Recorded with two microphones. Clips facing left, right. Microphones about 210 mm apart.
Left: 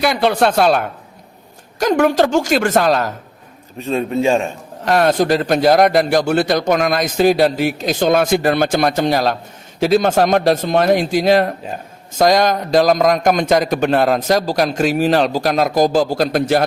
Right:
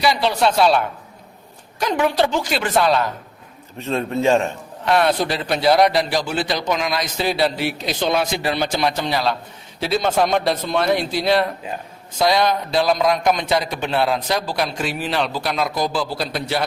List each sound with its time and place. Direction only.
0.0 s a man's voice: 55° left (ahead or behind)
3.8 s a man's voice: 15° left (ahead or behind)
4.8 s a man's voice: 45° left (ahead or behind)